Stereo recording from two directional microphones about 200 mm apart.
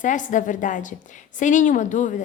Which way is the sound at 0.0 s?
40° left (ahead or behind).